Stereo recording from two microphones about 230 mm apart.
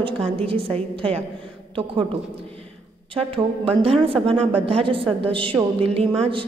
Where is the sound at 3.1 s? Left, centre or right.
Right.